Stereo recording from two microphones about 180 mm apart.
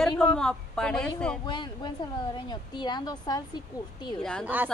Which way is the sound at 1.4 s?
25° left (ahead or behind).